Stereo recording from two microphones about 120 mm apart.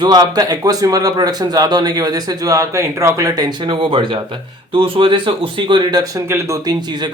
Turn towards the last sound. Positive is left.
turn(degrees=-35)  # may be behind; listen again after turning